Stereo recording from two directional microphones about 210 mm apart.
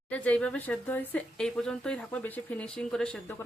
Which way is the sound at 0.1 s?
5° left (ahead or behind).